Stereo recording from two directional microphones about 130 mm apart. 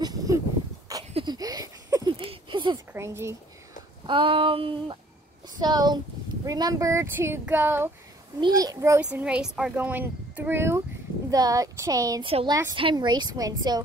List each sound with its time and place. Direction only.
0.0 s a sound: 30° right (ahead or behind)
2.1 s a sound: 40° right (ahead or behind)
2.9 s speech: 20° right (ahead or behind)
4.0 s speech: 40° right (ahead or behind); by 7.9 s 15° right (ahead or behind)
8.4 s speech: 30° right (ahead or behind)
9.1 s speech: 10° right (ahead or behind)
11.2 s speech: 30° right (ahead or behind)
12.7 s speech: 40° right (ahead or behind)